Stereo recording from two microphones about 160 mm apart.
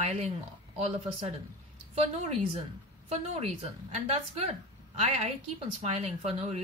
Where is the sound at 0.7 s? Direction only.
40° right (ahead or behind).